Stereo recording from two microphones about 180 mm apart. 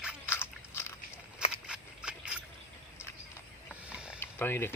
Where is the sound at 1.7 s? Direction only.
5° right (ahead or behind).